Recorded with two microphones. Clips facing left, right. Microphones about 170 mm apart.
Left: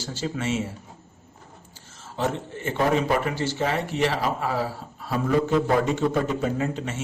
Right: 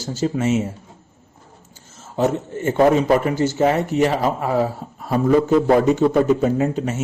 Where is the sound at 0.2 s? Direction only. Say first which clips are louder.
Right 8 dB; 40° right (ahead or behind).